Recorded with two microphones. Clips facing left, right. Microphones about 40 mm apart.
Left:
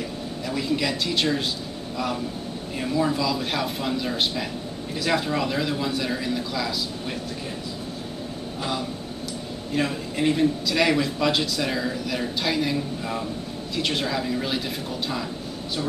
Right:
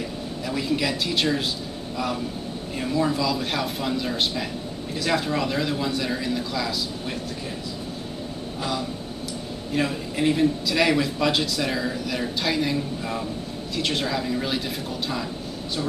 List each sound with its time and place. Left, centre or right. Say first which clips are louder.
0.5 s speech: even; centre
2.8 s a man's voice: even; centre
9.8 s a man's voice: even; centre